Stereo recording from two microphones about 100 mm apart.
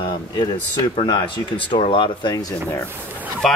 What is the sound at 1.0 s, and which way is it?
Speech, 55° left (ahead or behind).